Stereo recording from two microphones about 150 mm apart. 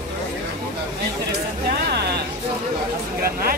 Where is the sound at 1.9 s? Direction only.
90° right.